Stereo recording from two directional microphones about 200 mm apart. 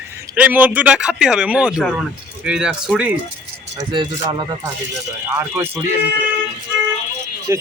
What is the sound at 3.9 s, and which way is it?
Speech, 25° right (ahead or behind).